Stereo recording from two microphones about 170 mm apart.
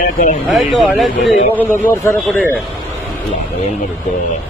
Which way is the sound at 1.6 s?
15° left (ahead or behind).